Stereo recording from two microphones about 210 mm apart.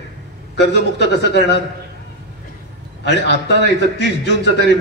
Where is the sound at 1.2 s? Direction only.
55° left (ahead or behind).